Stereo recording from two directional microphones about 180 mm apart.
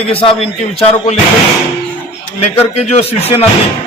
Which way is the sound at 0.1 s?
30° left (ahead or behind).